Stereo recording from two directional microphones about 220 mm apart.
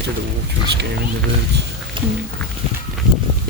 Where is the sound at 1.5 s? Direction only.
50° right (ahead or behind).